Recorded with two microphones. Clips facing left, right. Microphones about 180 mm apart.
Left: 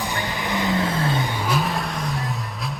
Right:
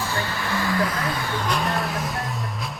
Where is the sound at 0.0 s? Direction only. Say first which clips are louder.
Left 1 dB; 15° left (ahead or behind).